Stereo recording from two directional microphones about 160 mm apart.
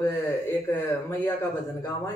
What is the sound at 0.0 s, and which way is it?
Speech, 15° left (ahead or behind).